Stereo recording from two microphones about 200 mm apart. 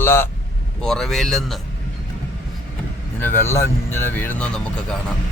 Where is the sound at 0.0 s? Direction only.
10° left (ahead or behind).